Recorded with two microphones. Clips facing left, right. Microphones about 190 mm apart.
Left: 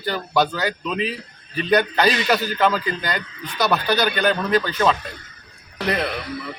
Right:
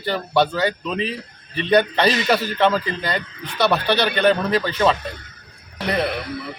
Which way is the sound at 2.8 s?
25° right (ahead or behind).